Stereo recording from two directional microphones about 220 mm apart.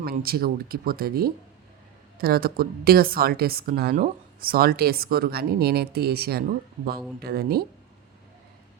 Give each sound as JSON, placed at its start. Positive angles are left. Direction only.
{"t": 0.0, "sound": "a woman's voice", "side_deg": -45}